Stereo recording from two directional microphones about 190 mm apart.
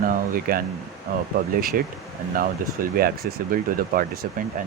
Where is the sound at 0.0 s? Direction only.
50° right (ahead or behind).